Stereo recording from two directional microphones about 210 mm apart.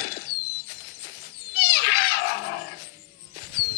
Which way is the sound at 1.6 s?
50° left (ahead or behind).